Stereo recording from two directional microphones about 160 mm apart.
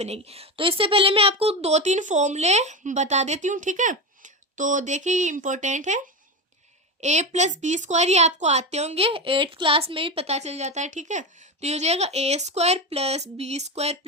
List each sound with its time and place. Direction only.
0.0 s a woman's voice: 40° right (ahead or behind)
7.0 s a woman's voice: 45° right (ahead or behind)